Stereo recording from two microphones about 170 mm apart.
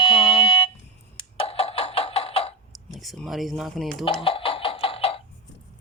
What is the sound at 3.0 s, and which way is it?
Speech, centre (ahead or behind).